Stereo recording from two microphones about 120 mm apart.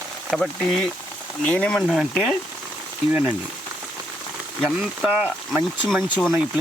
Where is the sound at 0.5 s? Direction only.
Centre (ahead or behind).